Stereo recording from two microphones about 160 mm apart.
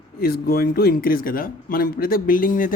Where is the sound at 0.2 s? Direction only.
70° left (ahead or behind).